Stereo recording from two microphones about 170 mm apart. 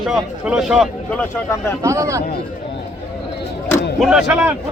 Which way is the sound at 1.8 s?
20° right (ahead or behind).